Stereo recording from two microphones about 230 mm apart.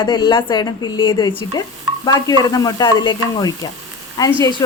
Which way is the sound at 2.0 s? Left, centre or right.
Centre.